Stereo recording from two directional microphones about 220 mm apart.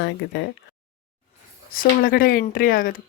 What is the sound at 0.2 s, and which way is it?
Speech, 55° left (ahead or behind).